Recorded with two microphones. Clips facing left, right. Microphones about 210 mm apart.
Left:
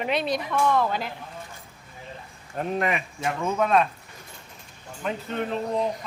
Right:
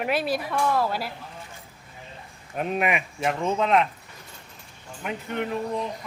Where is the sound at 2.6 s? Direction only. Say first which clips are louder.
Right 1 dB; 15° right (ahead or behind).